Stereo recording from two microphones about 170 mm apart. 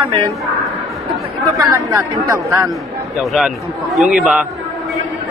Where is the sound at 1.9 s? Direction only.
20° right (ahead or behind).